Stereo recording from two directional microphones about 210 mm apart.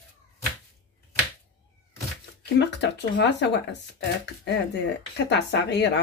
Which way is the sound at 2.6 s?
55° left (ahead or behind).